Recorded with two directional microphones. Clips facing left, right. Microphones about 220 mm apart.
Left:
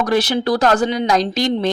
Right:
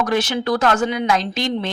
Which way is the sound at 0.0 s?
35° left (ahead or behind).